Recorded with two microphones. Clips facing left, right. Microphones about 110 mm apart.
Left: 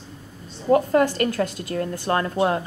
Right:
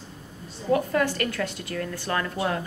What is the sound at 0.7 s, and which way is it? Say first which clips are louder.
A woman's voice: left 5 dB; 30° left (ahead or behind).